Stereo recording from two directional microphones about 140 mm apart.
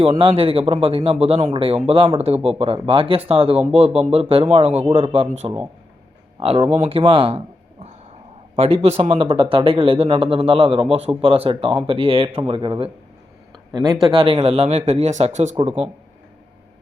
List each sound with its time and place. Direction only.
0.1 s speech: 40° right (ahead or behind)
6.4 s speech: 45° right (ahead or behind)
8.5 s speech: 45° right (ahead or behind)